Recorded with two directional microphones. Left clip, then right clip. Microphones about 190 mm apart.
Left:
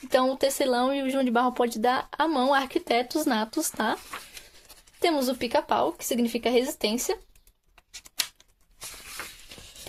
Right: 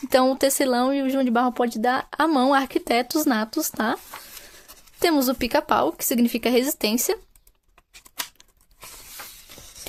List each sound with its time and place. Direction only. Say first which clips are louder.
0.1 s speech: right 4 dB; 40° right (ahead or behind)
4.9 s speech: right 4 dB; 40° right (ahead or behind)